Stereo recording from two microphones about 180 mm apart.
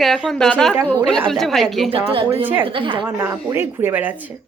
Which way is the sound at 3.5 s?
15° right (ahead or behind).